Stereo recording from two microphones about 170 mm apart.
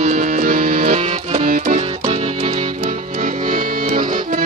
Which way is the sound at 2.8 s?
50° right (ahead or behind).